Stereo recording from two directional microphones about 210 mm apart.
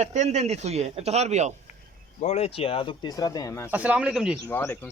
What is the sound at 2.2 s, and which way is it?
Speech, 30° left (ahead or behind).